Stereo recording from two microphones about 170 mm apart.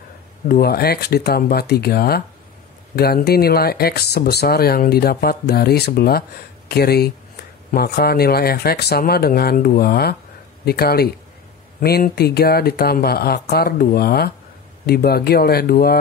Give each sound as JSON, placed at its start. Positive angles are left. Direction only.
{"t": 0.5, "sound": "speech", "side_deg": 65}